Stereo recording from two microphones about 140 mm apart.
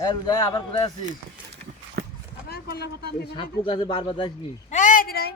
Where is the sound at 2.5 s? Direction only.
90° left.